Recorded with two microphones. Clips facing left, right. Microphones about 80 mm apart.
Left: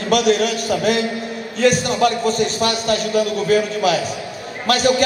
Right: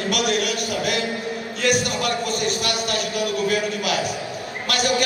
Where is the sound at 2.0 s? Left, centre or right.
Left.